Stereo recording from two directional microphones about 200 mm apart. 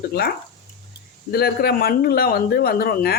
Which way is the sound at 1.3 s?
50° left (ahead or behind).